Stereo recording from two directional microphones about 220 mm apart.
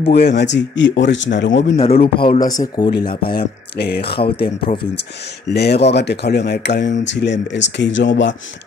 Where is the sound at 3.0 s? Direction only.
45° left (ahead or behind).